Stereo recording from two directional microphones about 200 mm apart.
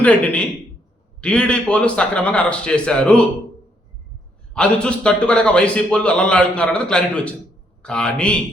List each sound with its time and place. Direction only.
0.0 s a man's voice: 5° left (ahead or behind)
4.5 s a man's voice: 5° left (ahead or behind)